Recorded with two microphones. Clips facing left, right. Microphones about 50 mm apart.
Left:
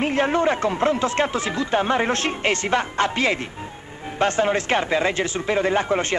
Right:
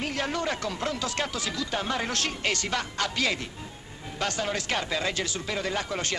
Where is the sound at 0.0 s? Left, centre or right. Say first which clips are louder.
Left 10 dB; left.